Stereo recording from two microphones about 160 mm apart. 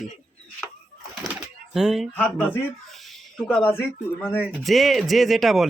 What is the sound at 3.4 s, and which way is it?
Speech, 5° left (ahead or behind).